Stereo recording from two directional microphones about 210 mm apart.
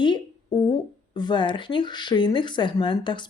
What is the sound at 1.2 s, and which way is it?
A woman's voice, 20° left (ahead or behind).